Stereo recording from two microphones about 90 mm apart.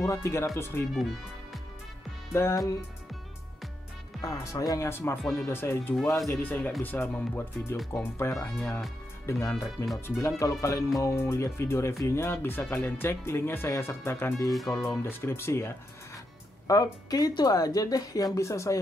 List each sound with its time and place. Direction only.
0.0 s speech: 35° left (ahead or behind)
0.9 s speech: centre (ahead or behind)
2.3 s speech: 35° left (ahead or behind)
4.2 s speech: 40° left (ahead or behind)
16.6 s speech: 40° left (ahead or behind)